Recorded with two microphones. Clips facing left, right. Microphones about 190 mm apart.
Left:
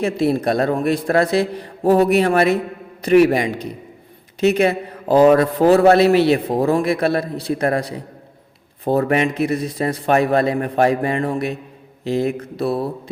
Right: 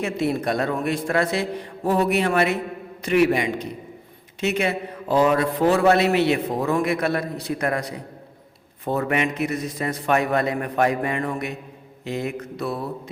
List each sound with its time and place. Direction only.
0.0 s a man's voice: 35° left (ahead or behind)